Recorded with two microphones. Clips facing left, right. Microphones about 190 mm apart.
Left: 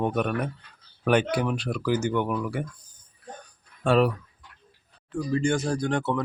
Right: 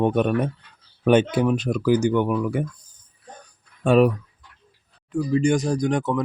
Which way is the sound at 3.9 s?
15° right (ahead or behind).